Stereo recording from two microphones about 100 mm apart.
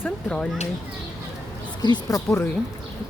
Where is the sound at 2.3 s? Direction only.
20° left (ahead or behind).